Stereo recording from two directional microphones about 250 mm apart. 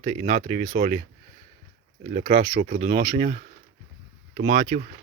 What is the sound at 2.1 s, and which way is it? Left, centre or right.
Speech, right.